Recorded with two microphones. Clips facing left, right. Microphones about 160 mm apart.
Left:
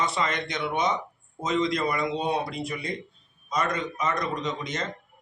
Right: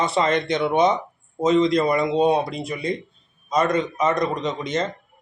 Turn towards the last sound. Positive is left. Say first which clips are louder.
# right 6 dB
turn(degrees=-25)  # may be behind; listen again after turning